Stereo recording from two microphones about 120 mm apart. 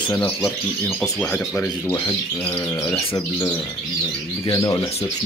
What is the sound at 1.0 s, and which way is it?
Speech, 10° left (ahead or behind).